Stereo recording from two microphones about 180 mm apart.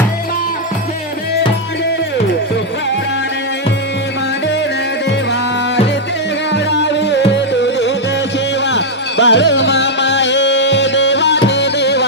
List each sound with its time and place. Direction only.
5.0 s music: 75° left (ahead or behind)